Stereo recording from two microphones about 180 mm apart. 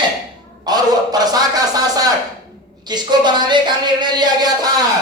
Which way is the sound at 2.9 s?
25° right (ahead or behind).